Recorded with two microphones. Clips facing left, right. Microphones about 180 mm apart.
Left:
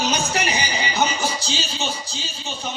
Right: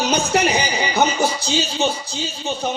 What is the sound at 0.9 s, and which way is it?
Music, 60° right (ahead or behind).